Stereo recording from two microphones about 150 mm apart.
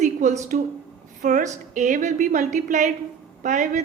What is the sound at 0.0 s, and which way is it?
A woman's voice, 55° right (ahead or behind).